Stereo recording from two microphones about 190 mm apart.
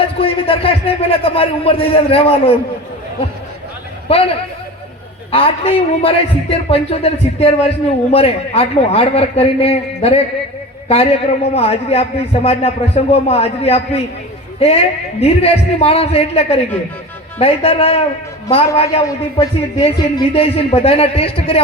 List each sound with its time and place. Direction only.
0.2 s a man's voice: 30° left (ahead or behind)
4.1 s a man's voice: 30° left (ahead or behind)